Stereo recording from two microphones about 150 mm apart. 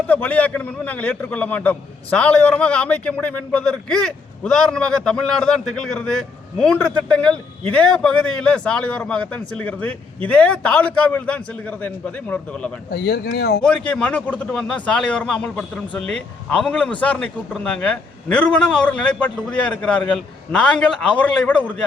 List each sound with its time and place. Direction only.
0.1 s a man's voice: 10° left (ahead or behind)
12.9 s speech: 90° left
13.6 s a man's voice: 5° left (ahead or behind)